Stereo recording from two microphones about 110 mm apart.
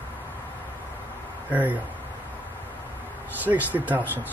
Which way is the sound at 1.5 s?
15° right (ahead or behind).